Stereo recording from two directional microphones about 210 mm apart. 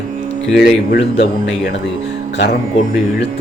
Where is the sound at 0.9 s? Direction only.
55° left (ahead or behind).